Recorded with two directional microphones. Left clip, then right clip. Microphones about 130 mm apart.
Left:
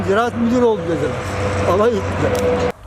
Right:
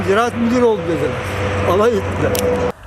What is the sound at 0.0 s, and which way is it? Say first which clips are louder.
Speech: right 1 dB; centre (ahead or behind).